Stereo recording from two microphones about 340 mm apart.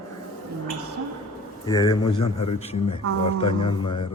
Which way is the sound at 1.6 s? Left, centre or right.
Centre.